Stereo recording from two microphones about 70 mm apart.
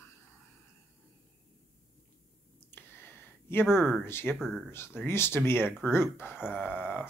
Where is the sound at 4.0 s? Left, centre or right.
Left.